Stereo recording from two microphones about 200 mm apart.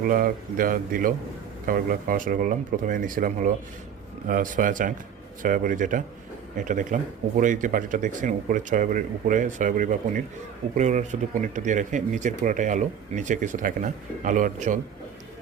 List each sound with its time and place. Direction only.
0.1 s speech: 45° right (ahead or behind)